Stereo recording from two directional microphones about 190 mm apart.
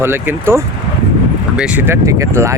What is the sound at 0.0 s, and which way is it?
Speech, 10° right (ahead or behind).